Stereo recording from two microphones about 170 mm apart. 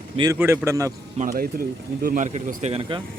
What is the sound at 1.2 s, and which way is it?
Speech, 55° right (ahead or behind).